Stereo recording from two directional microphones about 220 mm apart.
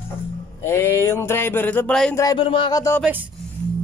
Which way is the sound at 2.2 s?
20° left (ahead or behind).